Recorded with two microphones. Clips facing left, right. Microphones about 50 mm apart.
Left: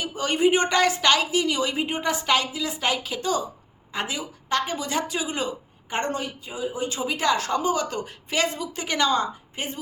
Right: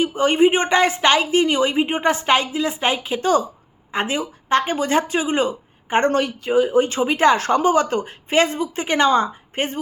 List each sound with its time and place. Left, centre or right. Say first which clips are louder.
0.0 s a woman's voice: right 6 dB; right
6.1 s speech: right 10 dB; right
6.8 s a woman's voice: right 8 dB; right